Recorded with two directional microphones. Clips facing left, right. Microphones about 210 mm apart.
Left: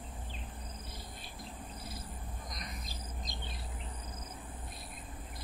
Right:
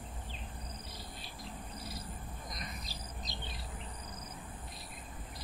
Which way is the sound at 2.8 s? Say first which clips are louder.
Left 1 dB; 50° left (ahead or behind).